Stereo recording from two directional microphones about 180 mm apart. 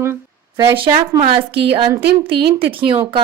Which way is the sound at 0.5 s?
25° right (ahead or behind).